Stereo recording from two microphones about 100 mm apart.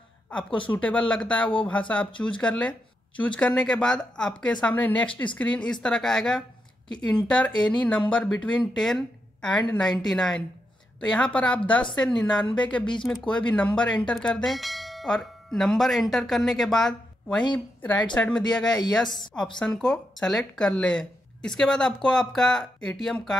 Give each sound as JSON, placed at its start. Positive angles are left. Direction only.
{"t": 0.4, "sound": "a woman's voice", "side_deg": 55}
{"t": 0.7, "sound": "speech", "side_deg": 15}
{"t": 19.6, "sound": "speech", "side_deg": 5}